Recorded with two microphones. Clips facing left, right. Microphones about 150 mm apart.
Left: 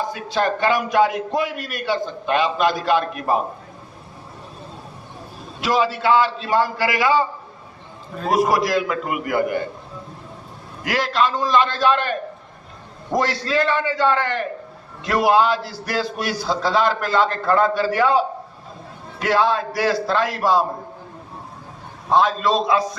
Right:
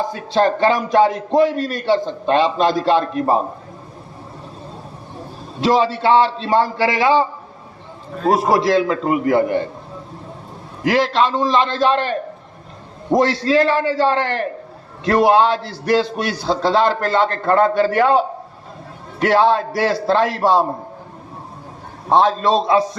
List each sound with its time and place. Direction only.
0.0 s speech: 30° right (ahead or behind)
5.5 s speech: 30° right (ahead or behind)
8.3 s speech: 25° right (ahead or behind)
10.8 s a man's voice: 30° right (ahead or behind)
19.4 s speech: 25° right (ahead or behind)
22.4 s speech: 30° right (ahead or behind)